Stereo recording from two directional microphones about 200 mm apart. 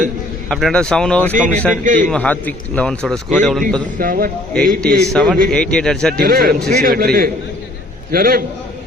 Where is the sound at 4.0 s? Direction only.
45° right (ahead or behind).